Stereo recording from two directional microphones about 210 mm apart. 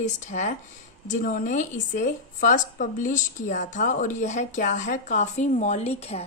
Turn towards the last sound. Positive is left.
turn(degrees=30)  # may be behind; listen again after turning